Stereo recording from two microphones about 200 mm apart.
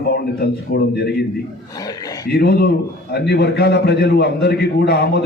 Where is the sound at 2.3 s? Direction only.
55° left (ahead or behind).